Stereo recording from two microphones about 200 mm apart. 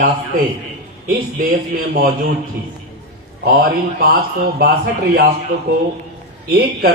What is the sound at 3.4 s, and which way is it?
Speech, 50° right (ahead or behind).